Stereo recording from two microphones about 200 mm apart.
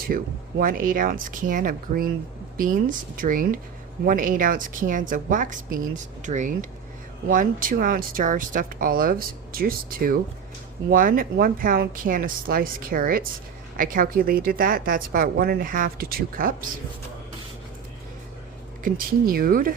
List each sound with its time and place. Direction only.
0.1 s a woman's voice: 45° right (ahead or behind)
18.8 s a woman's voice: 45° right (ahead or behind)